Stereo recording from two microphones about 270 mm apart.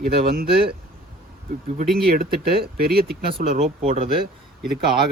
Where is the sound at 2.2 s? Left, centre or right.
Right.